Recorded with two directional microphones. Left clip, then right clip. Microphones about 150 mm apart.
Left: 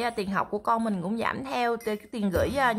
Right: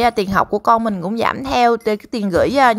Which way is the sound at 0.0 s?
40° right (ahead or behind).